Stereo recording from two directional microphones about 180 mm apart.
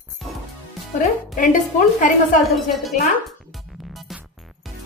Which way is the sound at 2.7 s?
Centre (ahead or behind).